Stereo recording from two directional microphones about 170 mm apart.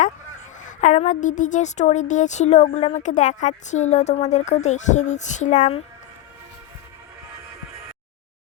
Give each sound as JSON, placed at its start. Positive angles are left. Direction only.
{"t": 0.6, "sound": "a woman's voice", "side_deg": 45}